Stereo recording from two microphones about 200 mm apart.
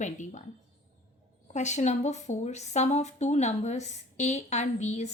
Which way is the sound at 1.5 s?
35° left (ahead or behind).